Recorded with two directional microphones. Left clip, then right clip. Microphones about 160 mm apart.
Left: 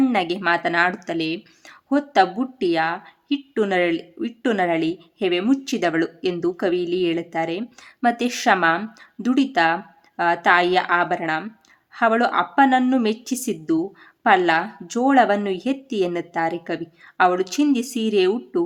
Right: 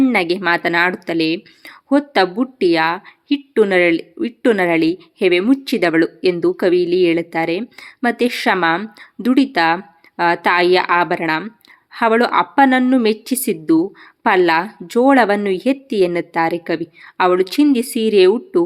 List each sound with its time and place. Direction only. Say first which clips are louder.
0.0 s speech: right 5 dB; 25° right (ahead or behind)